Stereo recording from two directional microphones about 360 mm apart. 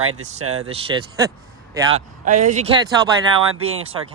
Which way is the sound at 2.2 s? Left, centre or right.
Right.